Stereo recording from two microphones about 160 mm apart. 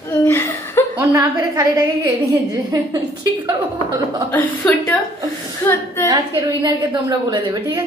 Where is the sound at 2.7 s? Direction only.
25° right (ahead or behind).